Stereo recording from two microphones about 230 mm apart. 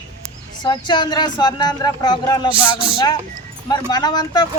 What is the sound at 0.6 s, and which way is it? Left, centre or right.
Speech, centre.